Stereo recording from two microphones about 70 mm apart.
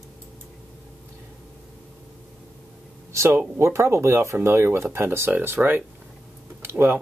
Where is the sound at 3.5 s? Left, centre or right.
Right.